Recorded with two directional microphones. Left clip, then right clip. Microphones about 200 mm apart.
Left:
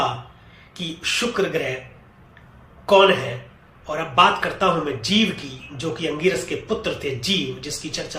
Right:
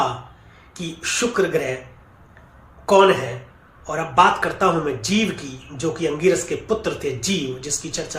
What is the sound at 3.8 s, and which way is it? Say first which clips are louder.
A man's voice: right 1 dB; 20° right (ahead or behind).